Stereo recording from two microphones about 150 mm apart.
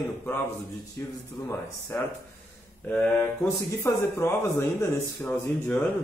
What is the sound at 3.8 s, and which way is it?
Speech, 20° left (ahead or behind).